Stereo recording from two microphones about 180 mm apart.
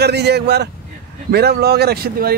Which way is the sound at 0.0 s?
65° right (ahead or behind).